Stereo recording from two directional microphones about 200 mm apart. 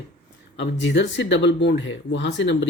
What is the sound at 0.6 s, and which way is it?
Speech, 60° left (ahead or behind).